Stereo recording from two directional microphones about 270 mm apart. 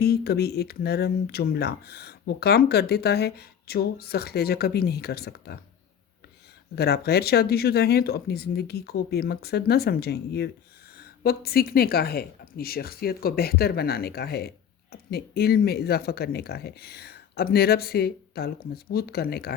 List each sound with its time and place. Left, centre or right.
0.0 s speech: left
6.7 s speech: left